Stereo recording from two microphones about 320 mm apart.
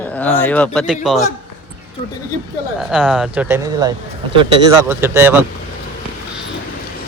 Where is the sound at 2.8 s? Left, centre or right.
Centre.